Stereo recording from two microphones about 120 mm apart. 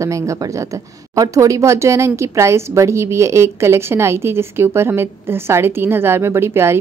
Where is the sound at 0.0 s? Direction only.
25° right (ahead or behind).